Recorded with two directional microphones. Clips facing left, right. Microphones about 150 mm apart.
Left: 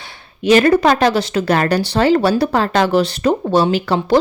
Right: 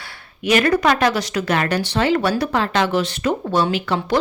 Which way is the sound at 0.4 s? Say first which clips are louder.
Left 5 dB; 30° left (ahead or behind).